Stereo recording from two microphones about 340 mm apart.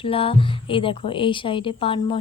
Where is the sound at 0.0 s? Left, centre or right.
Centre.